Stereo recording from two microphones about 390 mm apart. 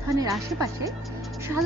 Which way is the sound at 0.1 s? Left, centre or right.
Centre.